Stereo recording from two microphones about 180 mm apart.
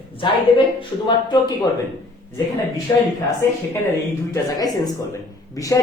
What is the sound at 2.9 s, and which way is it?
Speech, 20° left (ahead or behind).